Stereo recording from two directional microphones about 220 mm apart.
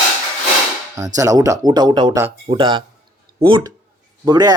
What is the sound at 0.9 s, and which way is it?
Speech, 15° right (ahead or behind).